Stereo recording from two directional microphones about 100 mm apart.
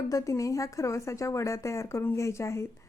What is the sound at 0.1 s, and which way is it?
A woman's voice, 35° left (ahead or behind).